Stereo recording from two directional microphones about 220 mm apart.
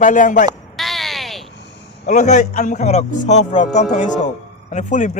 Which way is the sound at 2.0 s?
35° left (ahead or behind).